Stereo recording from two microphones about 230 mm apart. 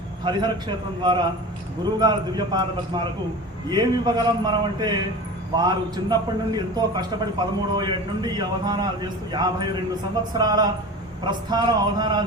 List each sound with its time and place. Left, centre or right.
0.3 s a man's voice: centre